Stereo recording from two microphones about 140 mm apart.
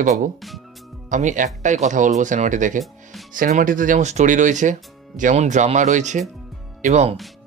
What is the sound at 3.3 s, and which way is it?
Speech, 85° right.